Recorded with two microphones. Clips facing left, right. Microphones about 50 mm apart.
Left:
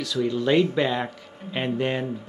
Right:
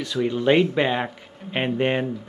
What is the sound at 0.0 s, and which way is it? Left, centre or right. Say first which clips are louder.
Speech: right 2 dB; right.